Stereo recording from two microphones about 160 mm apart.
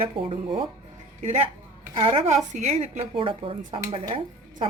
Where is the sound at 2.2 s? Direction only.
45° right (ahead or behind).